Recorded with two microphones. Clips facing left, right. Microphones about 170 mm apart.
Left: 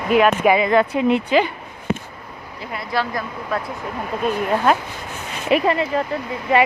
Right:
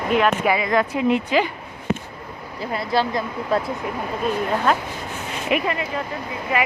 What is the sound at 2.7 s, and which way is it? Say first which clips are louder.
Speech: right 2 dB; 30° right (ahead or behind).